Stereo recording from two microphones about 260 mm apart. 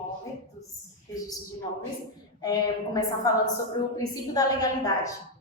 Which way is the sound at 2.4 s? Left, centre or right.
Centre.